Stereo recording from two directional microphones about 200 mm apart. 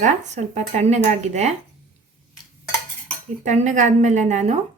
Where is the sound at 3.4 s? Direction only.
35° right (ahead or behind).